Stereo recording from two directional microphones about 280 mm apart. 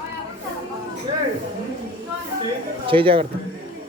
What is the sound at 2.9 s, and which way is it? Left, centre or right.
Speech, centre.